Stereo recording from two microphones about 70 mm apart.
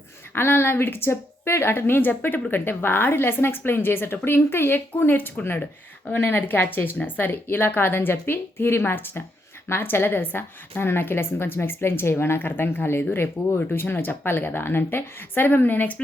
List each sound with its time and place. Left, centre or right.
0.3 s a woman's voice: left